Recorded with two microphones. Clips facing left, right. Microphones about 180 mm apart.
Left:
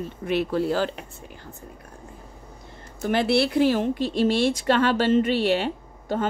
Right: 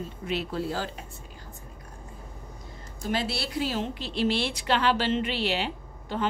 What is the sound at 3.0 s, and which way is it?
A woman's voice, 60° left (ahead or behind).